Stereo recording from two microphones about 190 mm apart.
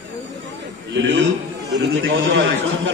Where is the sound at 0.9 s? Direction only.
70° right (ahead or behind).